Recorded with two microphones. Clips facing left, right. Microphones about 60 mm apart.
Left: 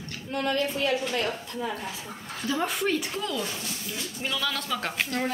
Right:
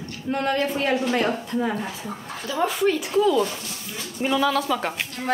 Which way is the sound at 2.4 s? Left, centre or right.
Centre.